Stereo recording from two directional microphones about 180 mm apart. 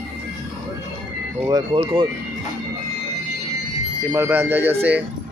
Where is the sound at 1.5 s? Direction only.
25° right (ahead or behind).